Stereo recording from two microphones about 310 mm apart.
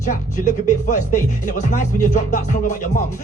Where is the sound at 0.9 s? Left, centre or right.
Left.